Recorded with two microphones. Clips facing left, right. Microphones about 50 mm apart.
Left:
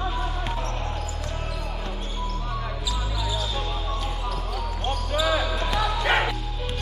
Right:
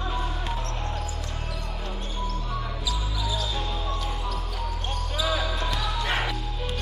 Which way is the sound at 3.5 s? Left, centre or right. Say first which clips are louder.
Left 1 dB; centre.